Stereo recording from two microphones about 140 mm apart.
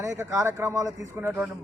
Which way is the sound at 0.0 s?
20° right (ahead or behind).